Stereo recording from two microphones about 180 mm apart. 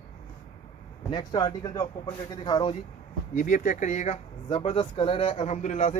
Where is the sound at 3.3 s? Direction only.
45° left (ahead or behind).